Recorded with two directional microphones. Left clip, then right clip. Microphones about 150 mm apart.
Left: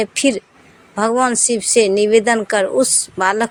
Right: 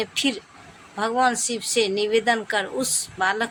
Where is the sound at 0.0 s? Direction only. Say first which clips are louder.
Left 8 dB; 50° left (ahead or behind).